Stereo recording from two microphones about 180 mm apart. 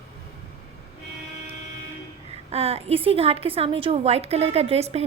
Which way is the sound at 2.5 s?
35° right (ahead or behind).